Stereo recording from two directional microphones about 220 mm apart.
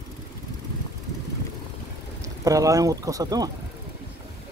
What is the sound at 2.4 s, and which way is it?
Speech, 15° right (ahead or behind).